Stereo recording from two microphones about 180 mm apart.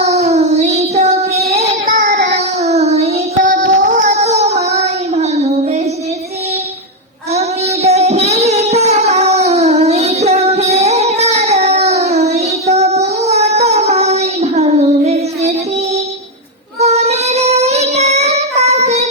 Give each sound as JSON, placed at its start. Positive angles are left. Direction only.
{"t": 0.0, "sound": "child singing", "side_deg": -35}
{"t": 7.3, "sound": "music", "side_deg": -35}
{"t": 16.8, "sound": "child singing", "side_deg": -35}